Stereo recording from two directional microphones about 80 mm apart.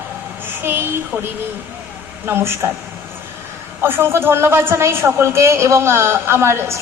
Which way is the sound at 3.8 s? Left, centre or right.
Right.